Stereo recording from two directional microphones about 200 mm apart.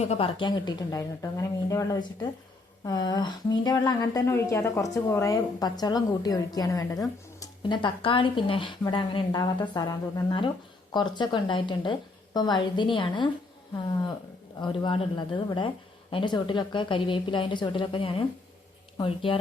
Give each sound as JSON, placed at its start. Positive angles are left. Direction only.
{"t": 0.0, "sound": "a woman's voice", "side_deg": 30}
{"t": 14.6, "sound": "a woman's voice", "side_deg": 25}